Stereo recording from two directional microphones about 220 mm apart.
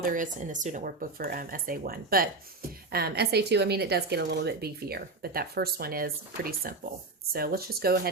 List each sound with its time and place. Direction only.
0.0 s speech: 35° right (ahead or behind)